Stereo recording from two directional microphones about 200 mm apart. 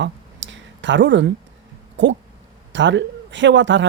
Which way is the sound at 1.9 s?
65° right (ahead or behind).